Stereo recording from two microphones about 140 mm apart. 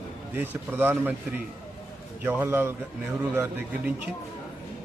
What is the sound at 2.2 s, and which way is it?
Speech, 15° right (ahead or behind).